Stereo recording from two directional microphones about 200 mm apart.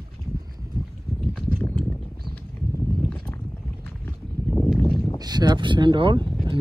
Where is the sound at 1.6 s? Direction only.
5° left (ahead or behind).